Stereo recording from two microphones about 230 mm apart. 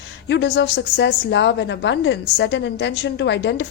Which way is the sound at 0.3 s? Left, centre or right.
Left.